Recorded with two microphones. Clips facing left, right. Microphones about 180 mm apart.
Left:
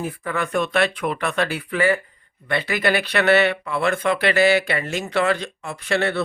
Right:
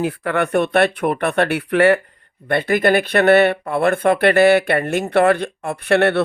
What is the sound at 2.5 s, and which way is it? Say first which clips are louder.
Speech: right 6 dB; 55° right (ahead or behind).